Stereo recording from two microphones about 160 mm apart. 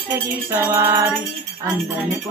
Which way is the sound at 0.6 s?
15° right (ahead or behind).